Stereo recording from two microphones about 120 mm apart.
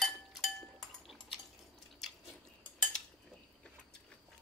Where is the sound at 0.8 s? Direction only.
Centre (ahead or behind).